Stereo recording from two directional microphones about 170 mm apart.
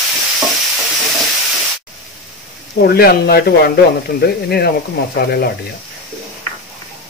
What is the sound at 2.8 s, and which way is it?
Speech, 65° left (ahead or behind).